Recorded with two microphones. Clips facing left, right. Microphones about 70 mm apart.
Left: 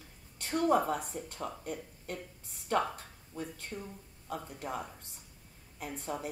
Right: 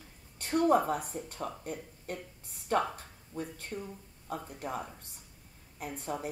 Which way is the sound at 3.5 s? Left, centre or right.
Right.